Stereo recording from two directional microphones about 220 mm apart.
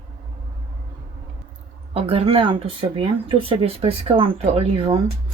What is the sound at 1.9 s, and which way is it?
Speech, 25° right (ahead or behind).